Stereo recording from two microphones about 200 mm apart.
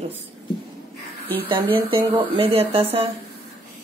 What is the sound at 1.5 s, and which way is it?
Speech, 25° right (ahead or behind).